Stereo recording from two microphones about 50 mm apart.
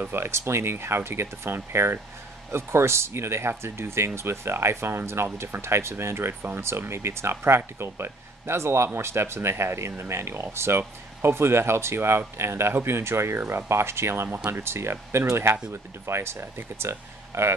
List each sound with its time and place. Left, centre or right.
0.0 s speech: right
13.7 s speech: right